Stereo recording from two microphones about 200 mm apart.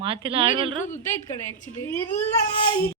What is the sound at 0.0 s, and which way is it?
Speech, 25° right (ahead or behind).